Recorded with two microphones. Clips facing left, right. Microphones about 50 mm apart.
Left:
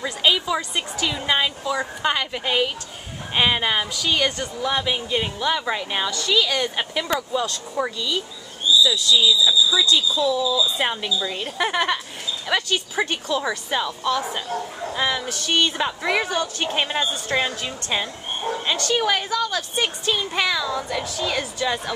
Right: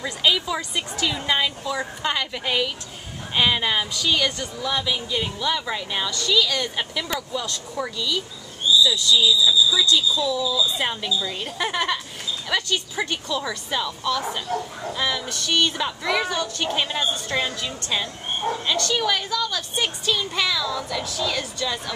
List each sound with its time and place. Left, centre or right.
0.0 s a woman's voice: centre